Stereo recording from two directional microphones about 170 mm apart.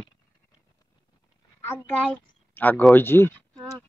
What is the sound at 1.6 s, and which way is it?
Speech, 10° left (ahead or behind).